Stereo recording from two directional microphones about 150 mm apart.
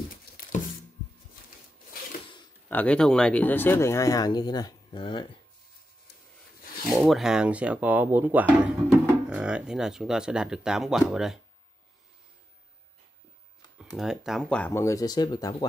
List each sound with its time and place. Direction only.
0.1 s a sound: 65° left (ahead or behind)
2.7 s speech: 10° left (ahead or behind); by 5.4 s 35° left (ahead or behind)
6.9 s speech: centre (ahead or behind)
13.9 s speech: 5° right (ahead or behind)
14.6 s speech: 15° left (ahead or behind)